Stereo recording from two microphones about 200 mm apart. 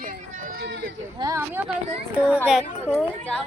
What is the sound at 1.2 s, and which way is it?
Speech, 15° right (ahead or behind).